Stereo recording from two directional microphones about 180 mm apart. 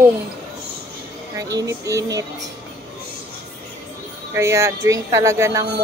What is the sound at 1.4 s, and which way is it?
Music, 20° right (ahead or behind).